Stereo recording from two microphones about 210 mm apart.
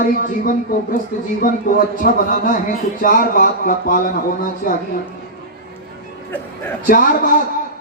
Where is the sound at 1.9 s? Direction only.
40° left (ahead or behind).